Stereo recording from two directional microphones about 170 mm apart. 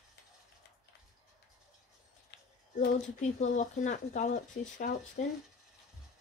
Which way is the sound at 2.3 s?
75° left (ahead or behind).